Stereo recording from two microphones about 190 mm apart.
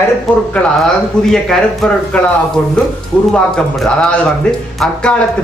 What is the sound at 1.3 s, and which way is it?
Speech, 5° left (ahead or behind).